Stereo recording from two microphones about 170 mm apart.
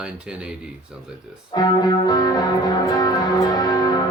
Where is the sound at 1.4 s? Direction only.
20° left (ahead or behind).